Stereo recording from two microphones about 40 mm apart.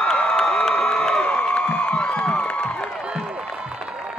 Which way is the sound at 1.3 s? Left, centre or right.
Left.